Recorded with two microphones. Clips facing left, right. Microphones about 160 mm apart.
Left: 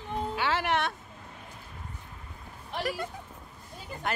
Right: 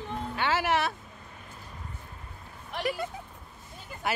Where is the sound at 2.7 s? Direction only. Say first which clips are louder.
Right 1 dB; centre (ahead or behind).